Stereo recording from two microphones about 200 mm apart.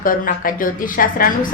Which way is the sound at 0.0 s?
45° left (ahead or behind).